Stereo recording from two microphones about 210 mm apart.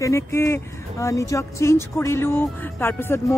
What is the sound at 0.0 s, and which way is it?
Speech, 15° left (ahead or behind).